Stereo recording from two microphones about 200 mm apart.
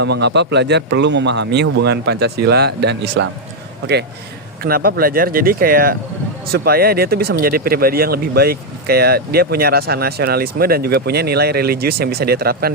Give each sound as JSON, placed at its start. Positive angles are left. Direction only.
{"t": 0.0, "sound": "speech", "side_deg": -60}
{"t": 4.6, "sound": "speech", "side_deg": -45}